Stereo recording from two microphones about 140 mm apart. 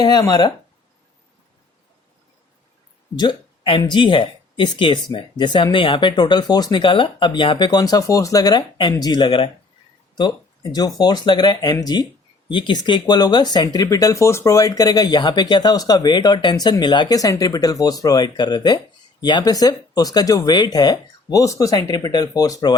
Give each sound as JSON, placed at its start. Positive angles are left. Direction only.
{"t": 0.0, "sound": "speech", "side_deg": 30}
{"t": 3.2, "sound": "speech", "side_deg": 35}